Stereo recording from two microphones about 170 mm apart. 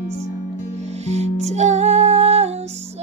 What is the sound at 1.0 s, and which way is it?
Music, 40° right (ahead or behind).